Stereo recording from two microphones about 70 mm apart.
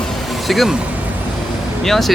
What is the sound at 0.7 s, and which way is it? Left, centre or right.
Vehicle, right.